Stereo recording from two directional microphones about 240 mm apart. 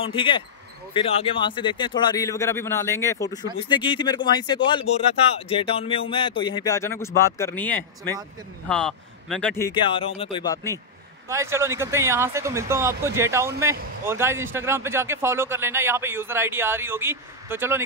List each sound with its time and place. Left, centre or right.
0.0 s speech: left; by 9.7 s centre
9.7 s speech: left
11.2 s speech: centre